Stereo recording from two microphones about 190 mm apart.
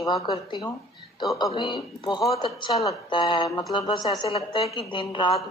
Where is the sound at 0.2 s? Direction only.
25° left (ahead or behind).